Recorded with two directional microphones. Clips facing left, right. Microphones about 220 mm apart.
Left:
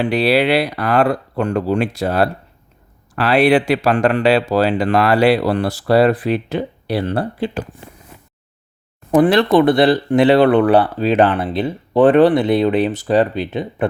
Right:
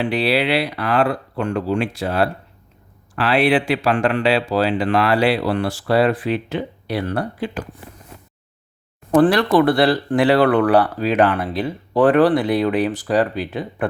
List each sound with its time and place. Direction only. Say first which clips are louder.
0.0 s speech: left 4 dB; 40° left (ahead or behind)
9.3 s speech: left 3 dB; 25° left (ahead or behind)